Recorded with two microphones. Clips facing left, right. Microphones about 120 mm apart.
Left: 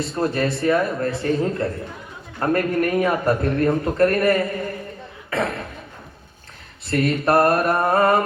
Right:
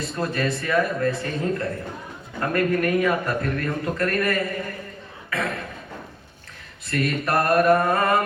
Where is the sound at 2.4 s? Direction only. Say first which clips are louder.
Left 2 dB; 30° left (ahead or behind).